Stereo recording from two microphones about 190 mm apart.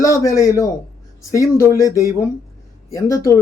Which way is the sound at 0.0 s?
15° left (ahead or behind).